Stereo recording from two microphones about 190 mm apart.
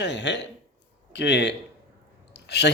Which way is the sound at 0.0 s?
65° left (ahead or behind).